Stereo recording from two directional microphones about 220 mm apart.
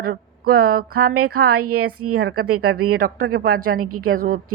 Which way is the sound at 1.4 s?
90° right.